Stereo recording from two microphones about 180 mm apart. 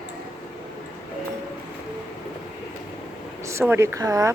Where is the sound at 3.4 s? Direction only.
15° right (ahead or behind).